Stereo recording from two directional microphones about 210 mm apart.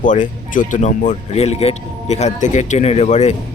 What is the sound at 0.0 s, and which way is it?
Speech, 40° left (ahead or behind).